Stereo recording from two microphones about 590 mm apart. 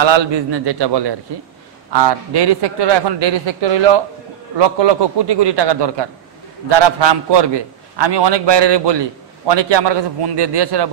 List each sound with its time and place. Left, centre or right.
0.0 s a man's voice: right